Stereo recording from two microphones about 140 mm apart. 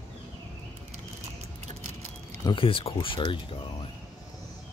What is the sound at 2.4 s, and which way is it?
Speech, 40° left (ahead or behind).